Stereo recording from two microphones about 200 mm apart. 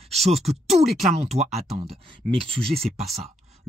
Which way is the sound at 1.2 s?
35° right (ahead or behind).